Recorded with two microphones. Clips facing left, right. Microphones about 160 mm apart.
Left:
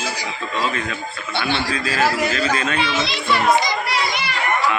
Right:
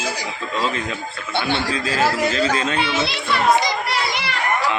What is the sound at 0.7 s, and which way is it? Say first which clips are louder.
A man's voice: even; 20° right (ahead or behind).